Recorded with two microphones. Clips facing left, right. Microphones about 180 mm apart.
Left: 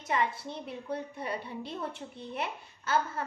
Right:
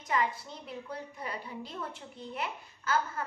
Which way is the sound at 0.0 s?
25° left (ahead or behind).